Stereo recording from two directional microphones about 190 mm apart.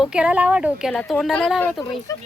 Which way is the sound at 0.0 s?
5° right (ahead or behind).